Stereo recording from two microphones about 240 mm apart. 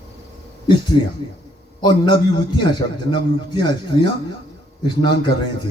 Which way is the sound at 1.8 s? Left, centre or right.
Centre.